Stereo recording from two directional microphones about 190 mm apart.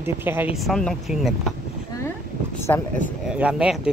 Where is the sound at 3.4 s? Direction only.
5° right (ahead or behind).